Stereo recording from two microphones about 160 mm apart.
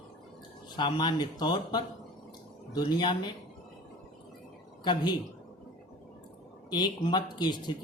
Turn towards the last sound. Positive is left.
turn(degrees=25)  # may be behind; listen again after turning